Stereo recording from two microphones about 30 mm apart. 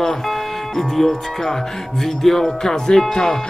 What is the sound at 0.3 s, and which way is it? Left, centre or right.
Speech, centre.